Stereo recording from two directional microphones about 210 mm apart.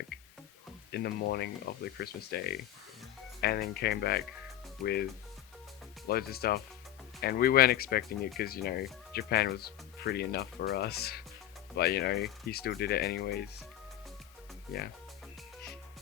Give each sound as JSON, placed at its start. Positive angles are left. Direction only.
{"t": 0.9, "sound": "speech", "side_deg": 50}
{"t": 6.1, "sound": "speech", "side_deg": 45}